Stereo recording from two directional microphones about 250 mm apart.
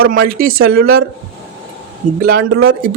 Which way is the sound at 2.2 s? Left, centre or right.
Right.